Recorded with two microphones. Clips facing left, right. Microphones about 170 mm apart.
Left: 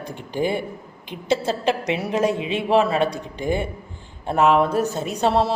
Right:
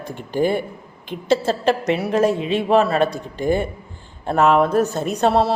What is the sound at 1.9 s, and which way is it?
Speech, 15° left (ahead or behind).